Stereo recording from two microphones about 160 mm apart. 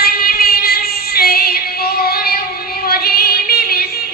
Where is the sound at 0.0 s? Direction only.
70° left (ahead or behind).